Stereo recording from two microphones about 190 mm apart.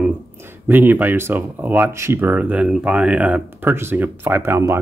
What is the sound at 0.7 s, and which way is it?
Speech, 10° right (ahead or behind).